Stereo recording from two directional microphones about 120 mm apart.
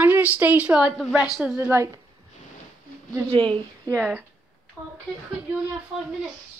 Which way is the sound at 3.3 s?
45° right (ahead or behind).